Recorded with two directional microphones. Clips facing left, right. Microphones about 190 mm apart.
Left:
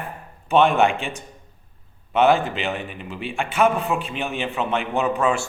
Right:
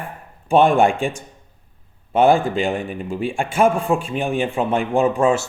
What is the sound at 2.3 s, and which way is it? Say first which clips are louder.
Speech: right 5 dB; 45° right (ahead or behind).